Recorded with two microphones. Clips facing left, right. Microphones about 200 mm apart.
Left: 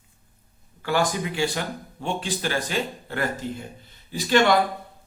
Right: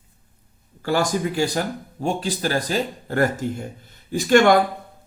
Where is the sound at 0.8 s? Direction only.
40° right (ahead or behind).